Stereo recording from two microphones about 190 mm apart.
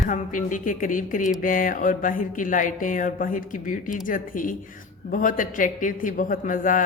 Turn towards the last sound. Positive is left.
turn(degrees=45)  # may be behind; listen again after turning